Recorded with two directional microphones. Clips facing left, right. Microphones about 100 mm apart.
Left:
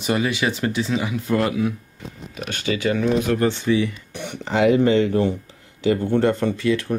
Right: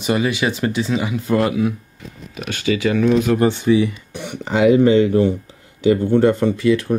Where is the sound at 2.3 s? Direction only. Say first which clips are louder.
Right 4 dB; 30° left (ahead or behind).